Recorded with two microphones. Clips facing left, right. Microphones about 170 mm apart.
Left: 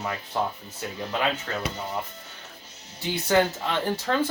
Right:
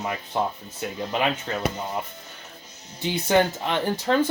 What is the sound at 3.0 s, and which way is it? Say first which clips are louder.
Speech: right 2 dB; 20° right (ahead or behind).